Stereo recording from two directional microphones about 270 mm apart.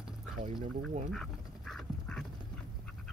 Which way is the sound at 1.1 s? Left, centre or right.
Centre.